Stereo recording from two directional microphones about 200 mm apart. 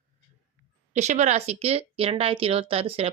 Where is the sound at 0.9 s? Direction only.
35° right (ahead or behind).